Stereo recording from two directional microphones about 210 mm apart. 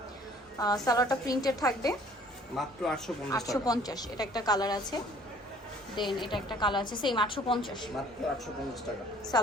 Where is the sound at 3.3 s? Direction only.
15° left (ahead or behind).